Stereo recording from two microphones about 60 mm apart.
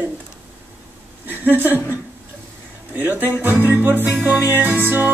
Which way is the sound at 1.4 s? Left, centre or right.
Right.